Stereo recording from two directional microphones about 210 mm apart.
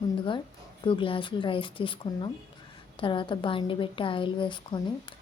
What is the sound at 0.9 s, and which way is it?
A woman's voice, 25° left (ahead or behind).